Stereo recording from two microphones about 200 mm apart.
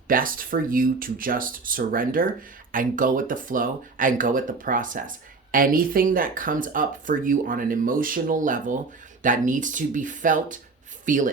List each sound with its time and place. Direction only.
0.1 s speech: 45° right (ahead or behind)